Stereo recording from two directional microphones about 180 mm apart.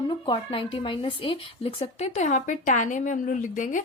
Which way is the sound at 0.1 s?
25° left (ahead or behind).